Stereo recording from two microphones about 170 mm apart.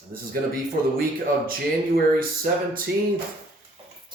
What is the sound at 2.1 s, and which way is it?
Speech, 55° right (ahead or behind).